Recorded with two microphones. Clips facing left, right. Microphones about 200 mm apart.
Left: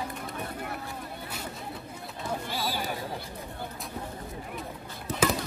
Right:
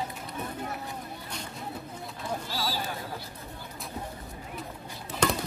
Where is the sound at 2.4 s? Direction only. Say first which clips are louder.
Left 1 dB; 55° left (ahead or behind).